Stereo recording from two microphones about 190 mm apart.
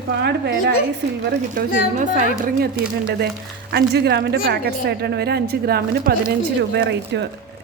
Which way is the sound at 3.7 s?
60° right (ahead or behind).